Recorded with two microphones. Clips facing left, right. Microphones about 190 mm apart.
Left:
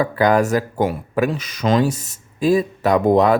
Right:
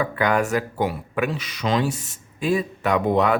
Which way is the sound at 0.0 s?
35° left (ahead or behind).